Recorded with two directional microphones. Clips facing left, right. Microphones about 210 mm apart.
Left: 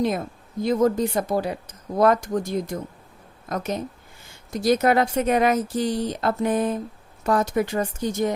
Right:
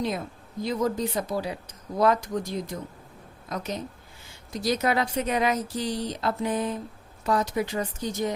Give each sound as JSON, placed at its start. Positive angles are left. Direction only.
{"t": 0.6, "sound": "speech", "side_deg": 50}